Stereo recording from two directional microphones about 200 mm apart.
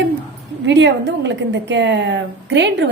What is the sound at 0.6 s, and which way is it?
A woman's voice, 60° right (ahead or behind).